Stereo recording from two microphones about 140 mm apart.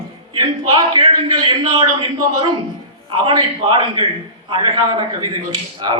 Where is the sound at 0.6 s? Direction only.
30° right (ahead or behind).